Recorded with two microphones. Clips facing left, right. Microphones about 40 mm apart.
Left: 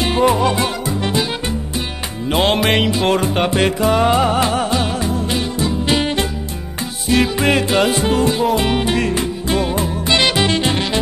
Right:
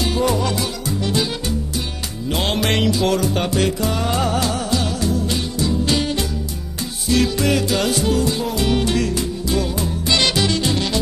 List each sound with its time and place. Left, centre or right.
0.0 s music: left
2.3 s music: left